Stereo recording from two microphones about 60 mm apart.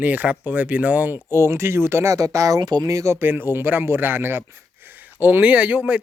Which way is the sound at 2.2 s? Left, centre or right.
Right.